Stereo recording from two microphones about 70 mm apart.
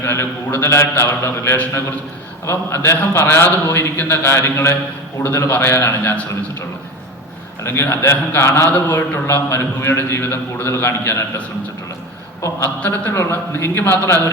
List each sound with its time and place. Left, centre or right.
0.0 s a man's voice: left
7.6 s a man's voice: left
9.2 s a man's voice: left
12.4 s a man's voice: left
12.8 s a man's voice: left
13.1 s a man's voice: left